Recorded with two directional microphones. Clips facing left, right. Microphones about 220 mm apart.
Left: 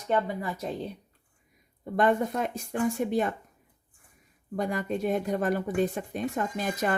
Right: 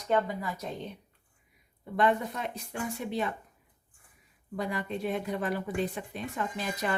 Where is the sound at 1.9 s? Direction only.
45° left (ahead or behind).